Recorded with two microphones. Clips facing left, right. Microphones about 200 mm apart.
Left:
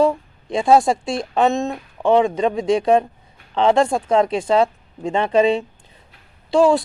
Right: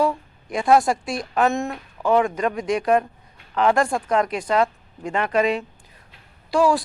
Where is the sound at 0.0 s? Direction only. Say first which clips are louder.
Left 5 dB; 25° left (ahead or behind).